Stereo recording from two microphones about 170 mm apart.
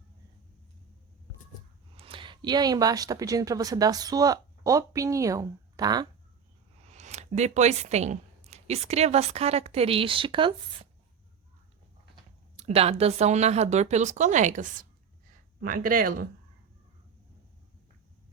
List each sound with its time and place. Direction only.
2.0 s speech: 30° right (ahead or behind)
6.8 s speech: 40° right (ahead or behind)
12.5 s speech: 40° right (ahead or behind); by 16.1 s 55° right (ahead or behind)